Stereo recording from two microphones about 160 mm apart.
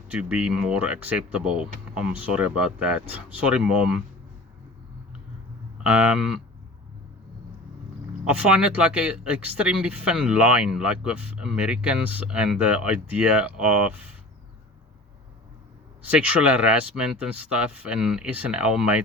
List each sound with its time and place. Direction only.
0.1 s speech: 5° right (ahead or behind)
5.9 s speech: 10° right (ahead or behind)
8.2 s speech: 5° right (ahead or behind)
16.0 s speech: 10° right (ahead or behind)